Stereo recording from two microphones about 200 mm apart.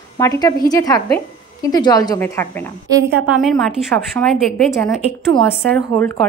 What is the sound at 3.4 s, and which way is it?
A woman's voice, centre (ahead or behind).